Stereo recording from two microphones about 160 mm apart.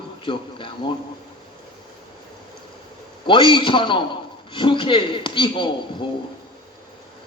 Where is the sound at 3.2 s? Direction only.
30° left (ahead or behind).